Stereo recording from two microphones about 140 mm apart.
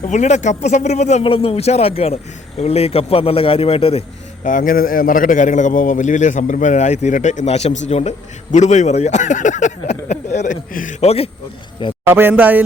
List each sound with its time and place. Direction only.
0.0 s speech: 55° left (ahead or behind)
4.4 s a man's voice: 70° left (ahead or behind)
12.0 s speech: 15° right (ahead or behind)